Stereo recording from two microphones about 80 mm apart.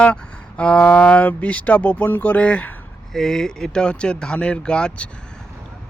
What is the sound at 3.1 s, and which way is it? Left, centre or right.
Speech, centre.